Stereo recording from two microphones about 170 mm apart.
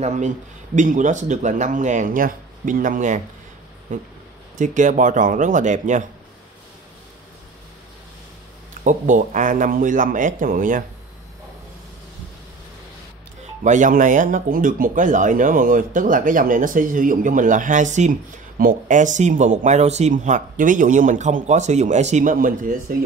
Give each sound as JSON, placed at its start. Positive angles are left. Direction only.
{"t": 0.0, "sound": "speech", "side_deg": -45}
{"t": 8.8, "sound": "speech", "side_deg": -50}
{"t": 13.7, "sound": "speech", "side_deg": -50}